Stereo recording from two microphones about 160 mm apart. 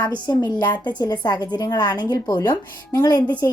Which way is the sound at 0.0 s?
25° left (ahead or behind).